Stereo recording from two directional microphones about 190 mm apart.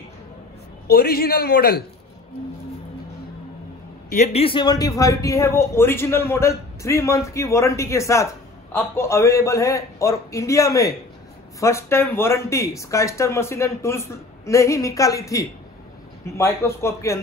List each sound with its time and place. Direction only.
0.8 s a man's voice: 55° left (ahead or behind)
4.1 s speech: 35° left (ahead or behind); by 17.2 s 15° left (ahead or behind)